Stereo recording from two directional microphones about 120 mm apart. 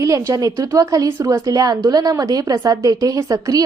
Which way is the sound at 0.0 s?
25° right (ahead or behind).